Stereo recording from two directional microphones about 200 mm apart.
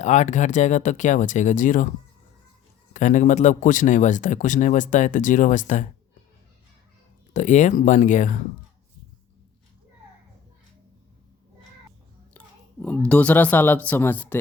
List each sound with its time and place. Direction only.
0.0 s speech: 35° left (ahead or behind)
2.9 s speech: 40° left (ahead or behind)
7.3 s speech: 40° left (ahead or behind)
12.8 s speech: 5° left (ahead or behind)